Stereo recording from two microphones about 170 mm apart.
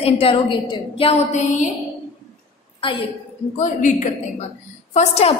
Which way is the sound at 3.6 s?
50° left (ahead or behind).